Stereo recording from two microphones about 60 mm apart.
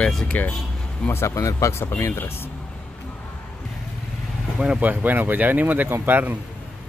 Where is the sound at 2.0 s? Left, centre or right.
Left.